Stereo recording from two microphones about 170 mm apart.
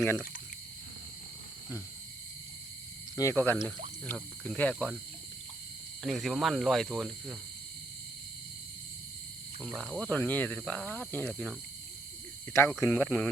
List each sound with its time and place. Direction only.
0.0 s cricket: 15° left (ahead or behind)
3.2 s cricket: 15° left (ahead or behind)
6.0 s speech: centre (ahead or behind)
9.7 s cricket: centre (ahead or behind)
12.8 s cricket: 10° left (ahead or behind)